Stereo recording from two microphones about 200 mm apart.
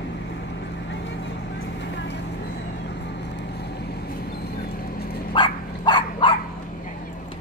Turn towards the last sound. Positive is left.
turn(degrees=25)  # may be behind; listen again after turning